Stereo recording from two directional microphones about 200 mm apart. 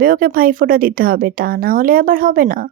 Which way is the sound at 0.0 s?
45° right (ahead or behind).